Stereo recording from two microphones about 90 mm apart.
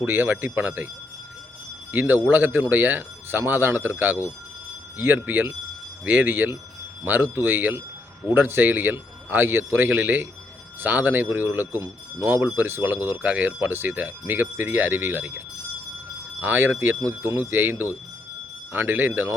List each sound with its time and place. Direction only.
0.0 s speech: 20° right (ahead or behind)
1.9 s speech: 20° right (ahead or behind)
16.4 s speech: 20° right (ahead or behind)